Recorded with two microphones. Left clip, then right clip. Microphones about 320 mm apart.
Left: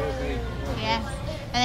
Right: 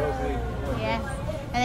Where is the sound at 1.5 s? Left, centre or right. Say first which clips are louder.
Left 2 dB; centre.